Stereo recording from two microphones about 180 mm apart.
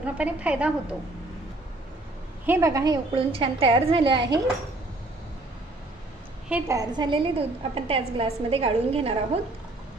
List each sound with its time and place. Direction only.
0.0 s a woman's voice: 5° right (ahead or behind)
2.4 s a woman's voice: 15° right (ahead or behind)
6.5 s a woman's voice: 20° right (ahead or behind)